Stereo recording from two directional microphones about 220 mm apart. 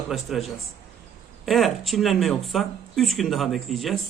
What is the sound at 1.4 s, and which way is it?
Speech, centre (ahead or behind).